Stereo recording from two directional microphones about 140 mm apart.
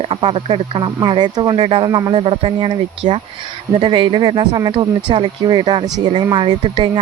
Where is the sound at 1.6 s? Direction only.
45° right (ahead or behind).